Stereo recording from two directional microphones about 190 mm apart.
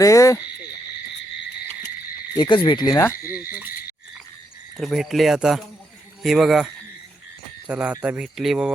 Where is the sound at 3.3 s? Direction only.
10° right (ahead or behind).